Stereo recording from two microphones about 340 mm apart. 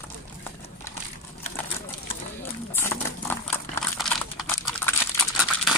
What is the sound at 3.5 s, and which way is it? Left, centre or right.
Crumpling, centre.